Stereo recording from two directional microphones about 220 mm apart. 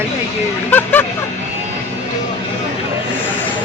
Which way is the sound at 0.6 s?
10° left (ahead or behind).